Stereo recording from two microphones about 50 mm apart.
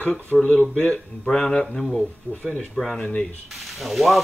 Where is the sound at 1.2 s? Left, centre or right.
Centre.